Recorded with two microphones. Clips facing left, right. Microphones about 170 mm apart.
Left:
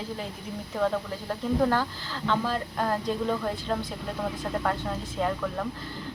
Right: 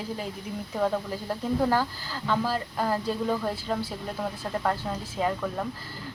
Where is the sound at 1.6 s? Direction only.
10° right (ahead or behind).